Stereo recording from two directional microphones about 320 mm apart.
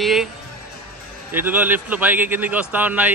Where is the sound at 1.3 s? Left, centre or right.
Centre.